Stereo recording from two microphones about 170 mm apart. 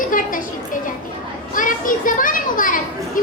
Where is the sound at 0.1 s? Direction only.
55° left (ahead or behind).